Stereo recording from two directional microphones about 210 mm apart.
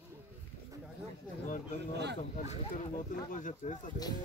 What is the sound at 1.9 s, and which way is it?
Speech, 55° right (ahead or behind).